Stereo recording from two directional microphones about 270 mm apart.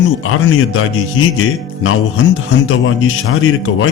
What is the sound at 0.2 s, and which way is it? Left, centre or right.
Speech, left.